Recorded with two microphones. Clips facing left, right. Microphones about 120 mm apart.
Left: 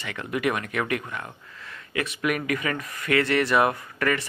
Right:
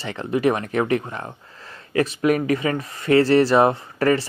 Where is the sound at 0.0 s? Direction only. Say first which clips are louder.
Right 6 dB; 30° right (ahead or behind).